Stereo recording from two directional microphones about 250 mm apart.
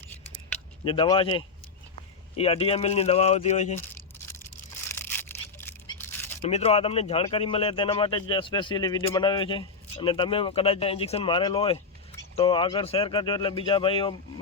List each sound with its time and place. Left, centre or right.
0.9 s speech: centre
4.4 s a sound: centre
6.4 s speech: left